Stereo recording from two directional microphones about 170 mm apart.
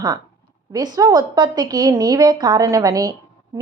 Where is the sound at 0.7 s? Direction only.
20° right (ahead or behind).